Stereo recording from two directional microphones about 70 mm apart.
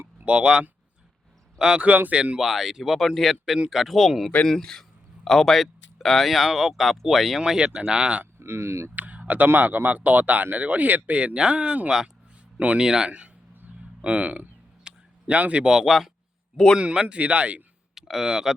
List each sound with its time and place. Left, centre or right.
0.3 s speech: centre
2.4 s speech: centre
8.4 s speech: right
9.0 s speech: right
17.9 s speech: centre